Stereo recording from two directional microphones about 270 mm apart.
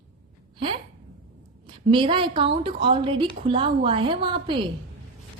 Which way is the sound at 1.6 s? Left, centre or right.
Centre.